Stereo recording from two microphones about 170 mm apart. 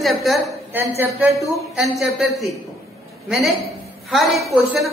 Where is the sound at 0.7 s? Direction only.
10° right (ahead or behind).